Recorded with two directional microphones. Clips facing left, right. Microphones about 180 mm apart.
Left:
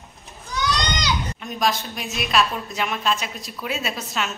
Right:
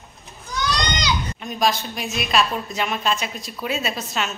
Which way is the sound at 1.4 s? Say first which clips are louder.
Right 3 dB; centre (ahead or behind).